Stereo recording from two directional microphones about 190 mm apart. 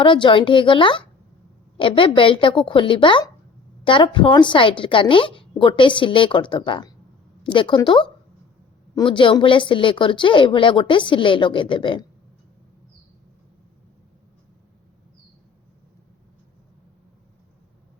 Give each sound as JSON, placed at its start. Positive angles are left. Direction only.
{"t": 0.0, "sound": "speech", "side_deg": 25}